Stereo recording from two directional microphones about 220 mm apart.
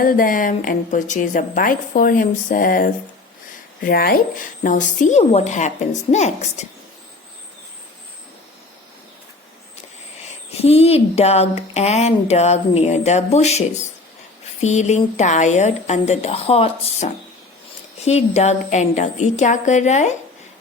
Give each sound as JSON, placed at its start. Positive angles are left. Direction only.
{"t": 0.0, "sound": "a woman's voice", "side_deg": 40}
{"t": 10.6, "sound": "a woman's voice", "side_deg": 25}